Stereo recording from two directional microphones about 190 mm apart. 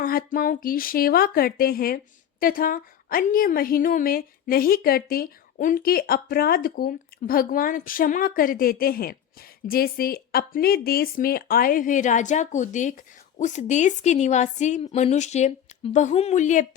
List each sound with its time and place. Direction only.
0.0 s a woman's voice: 50° left (ahead or behind)